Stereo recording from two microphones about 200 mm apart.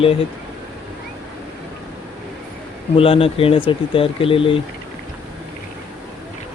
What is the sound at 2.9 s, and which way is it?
Speech, 30° left (ahead or behind).